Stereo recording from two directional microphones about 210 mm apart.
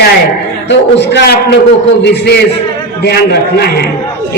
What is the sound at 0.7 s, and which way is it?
Speech, 55° left (ahead or behind).